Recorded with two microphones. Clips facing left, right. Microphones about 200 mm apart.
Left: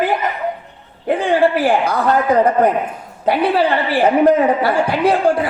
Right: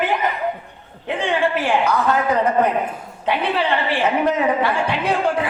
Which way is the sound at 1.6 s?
35° left (ahead or behind).